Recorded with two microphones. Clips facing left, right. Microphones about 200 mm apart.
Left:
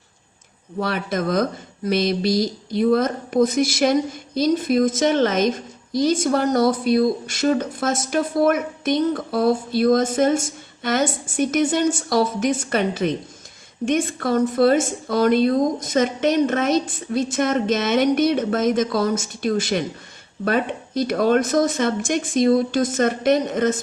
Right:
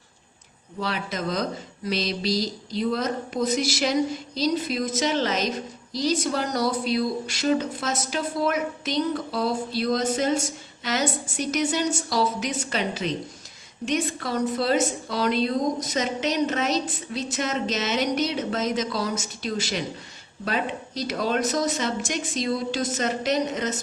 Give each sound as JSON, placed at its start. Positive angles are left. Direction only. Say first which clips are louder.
{"t": 0.8, "sound": "a woman's voice", "louder": "left 6 dB", "side_deg": 55}